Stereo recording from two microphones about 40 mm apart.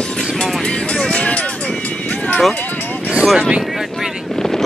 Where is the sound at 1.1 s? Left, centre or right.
Left.